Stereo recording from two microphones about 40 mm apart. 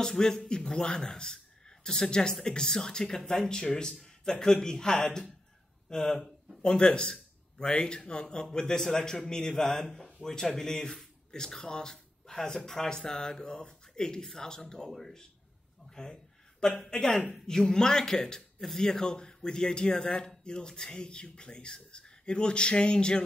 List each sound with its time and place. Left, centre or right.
0.0 s a man's voice: centre
14.9 s speech: centre
15.9 s a sound: centre
16.9 s speech: centre